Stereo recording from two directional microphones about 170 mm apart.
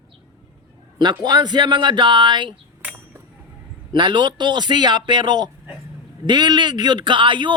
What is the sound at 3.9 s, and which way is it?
A man's voice, 25° right (ahead or behind).